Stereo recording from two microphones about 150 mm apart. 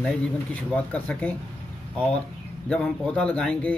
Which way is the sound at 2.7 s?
5° left (ahead or behind).